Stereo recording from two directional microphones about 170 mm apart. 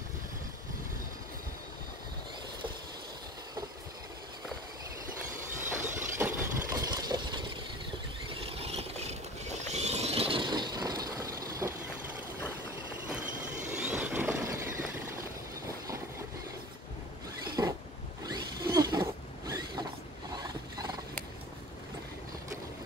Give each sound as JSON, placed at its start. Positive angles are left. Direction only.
{"t": 5.8, "sound": "a sound", "side_deg": -15}
{"t": 8.5, "sound": "vehicle", "side_deg": -35}
{"t": 11.6, "sound": "vehicle", "side_deg": -10}
{"t": 13.7, "sound": "vehicle", "side_deg": -5}
{"t": 17.6, "sound": "a sound", "side_deg": -20}
{"t": 18.2, "sound": "zipper", "side_deg": -25}